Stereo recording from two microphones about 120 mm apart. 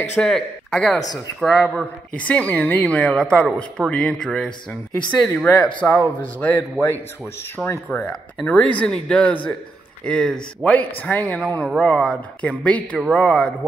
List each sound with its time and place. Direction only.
0.2 s speech: 5° left (ahead or behind); by 7.8 s 25° left (ahead or behind)
7.9 s speech: 10° left (ahead or behind)